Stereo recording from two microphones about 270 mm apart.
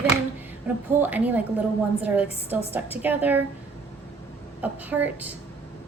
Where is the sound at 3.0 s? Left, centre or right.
Centre.